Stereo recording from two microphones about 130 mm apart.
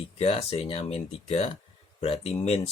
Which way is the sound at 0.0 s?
50° left (ahead or behind).